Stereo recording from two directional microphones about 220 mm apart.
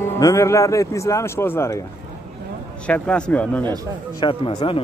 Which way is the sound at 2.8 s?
5° left (ahead or behind).